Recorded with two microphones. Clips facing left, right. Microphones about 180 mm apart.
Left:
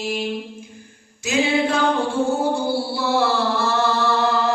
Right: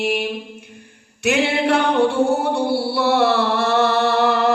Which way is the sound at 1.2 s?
65° right (ahead or behind).